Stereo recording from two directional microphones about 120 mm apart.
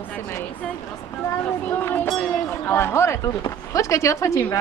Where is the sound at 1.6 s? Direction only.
15° left (ahead or behind).